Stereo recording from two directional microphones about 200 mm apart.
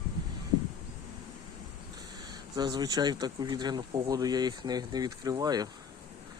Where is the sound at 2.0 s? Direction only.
20° right (ahead or behind).